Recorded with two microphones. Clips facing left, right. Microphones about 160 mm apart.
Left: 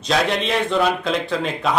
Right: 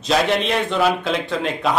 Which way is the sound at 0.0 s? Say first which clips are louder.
Right 2 dB; centre (ahead or behind).